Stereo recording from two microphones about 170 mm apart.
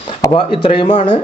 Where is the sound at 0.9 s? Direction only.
45° left (ahead or behind).